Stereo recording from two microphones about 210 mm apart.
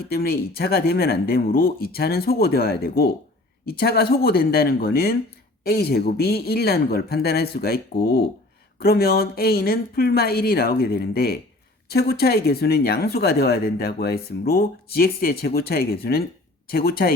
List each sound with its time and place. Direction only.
0.0 s speech: 45° left (ahead or behind)